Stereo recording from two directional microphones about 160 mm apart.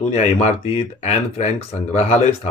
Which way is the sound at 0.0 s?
45° left (ahead or behind).